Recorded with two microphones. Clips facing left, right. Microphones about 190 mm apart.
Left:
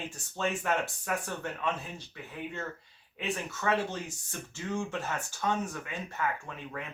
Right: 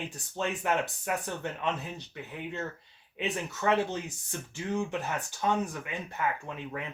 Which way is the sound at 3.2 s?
20° right (ahead or behind).